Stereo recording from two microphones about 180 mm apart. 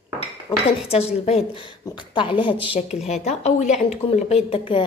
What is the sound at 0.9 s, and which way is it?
Speech, 35° left (ahead or behind).